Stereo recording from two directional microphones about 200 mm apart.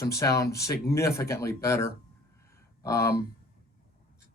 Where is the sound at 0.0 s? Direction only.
15° left (ahead or behind).